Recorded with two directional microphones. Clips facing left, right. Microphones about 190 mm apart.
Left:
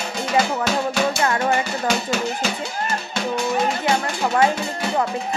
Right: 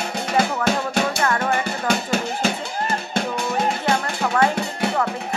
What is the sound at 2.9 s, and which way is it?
Music, 55° right (ahead or behind).